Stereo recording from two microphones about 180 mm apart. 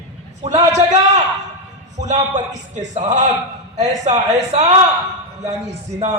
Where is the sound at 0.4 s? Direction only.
40° right (ahead or behind).